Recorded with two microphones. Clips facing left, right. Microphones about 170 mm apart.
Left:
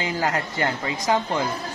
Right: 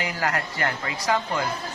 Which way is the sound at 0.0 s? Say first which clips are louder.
Left 2 dB; 20° left (ahead or behind).